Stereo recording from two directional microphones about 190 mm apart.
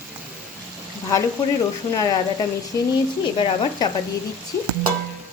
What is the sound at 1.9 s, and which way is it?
Speech, 20° left (ahead or behind).